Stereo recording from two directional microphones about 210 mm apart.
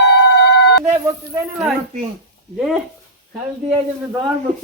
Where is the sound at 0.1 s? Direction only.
55° left (ahead or behind).